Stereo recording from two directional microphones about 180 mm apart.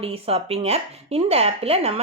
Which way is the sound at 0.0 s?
35° right (ahead or behind).